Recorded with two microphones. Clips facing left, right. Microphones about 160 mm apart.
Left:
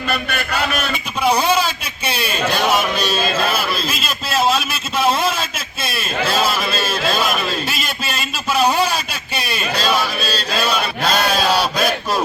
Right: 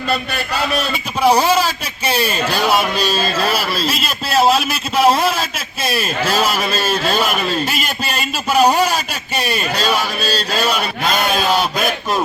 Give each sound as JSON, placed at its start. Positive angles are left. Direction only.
{"t": 0.1, "sound": "a man's voice", "side_deg": -30}
{"t": 3.2, "sound": "a man's voice", "side_deg": -35}